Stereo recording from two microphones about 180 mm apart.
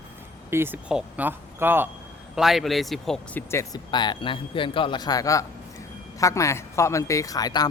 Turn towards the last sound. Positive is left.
turn(degrees=20)  # may be behind; listen again after turning